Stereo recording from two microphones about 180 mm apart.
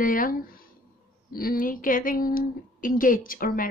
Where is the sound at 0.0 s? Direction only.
50° left (ahead or behind).